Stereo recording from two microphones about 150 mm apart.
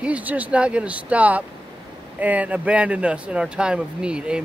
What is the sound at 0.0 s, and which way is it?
Speech, 10° right (ahead or behind).